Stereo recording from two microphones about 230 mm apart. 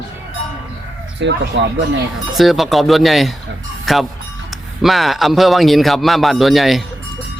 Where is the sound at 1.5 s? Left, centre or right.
Right.